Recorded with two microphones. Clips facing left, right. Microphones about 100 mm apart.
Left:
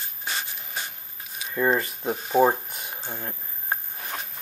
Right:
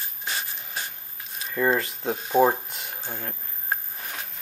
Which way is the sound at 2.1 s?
5° left (ahead or behind).